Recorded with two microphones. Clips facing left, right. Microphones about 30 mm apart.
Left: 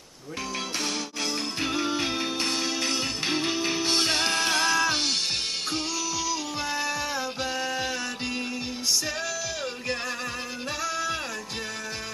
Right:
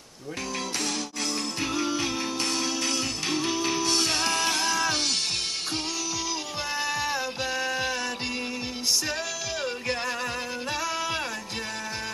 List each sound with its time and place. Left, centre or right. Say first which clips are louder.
1.6 s music: left 1 dB; left
4.8 s music: left 1 dB; centre
6.7 s music: right 2 dB; centre
10.8 s music: left 2 dB; centre